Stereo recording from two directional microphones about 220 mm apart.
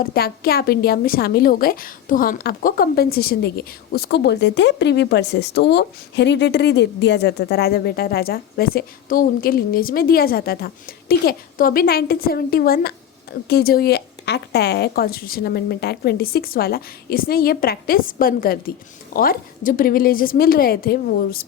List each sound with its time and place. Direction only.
0.0 s a woman's voice: 45° left (ahead or behind)